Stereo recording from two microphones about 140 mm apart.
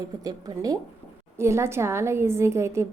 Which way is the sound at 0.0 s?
25° right (ahead or behind).